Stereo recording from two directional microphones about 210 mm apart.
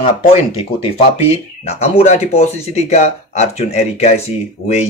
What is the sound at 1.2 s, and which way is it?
Speech, 30° left (ahead or behind).